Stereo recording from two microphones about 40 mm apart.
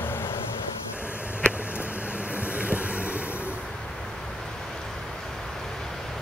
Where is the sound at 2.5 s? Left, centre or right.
Right.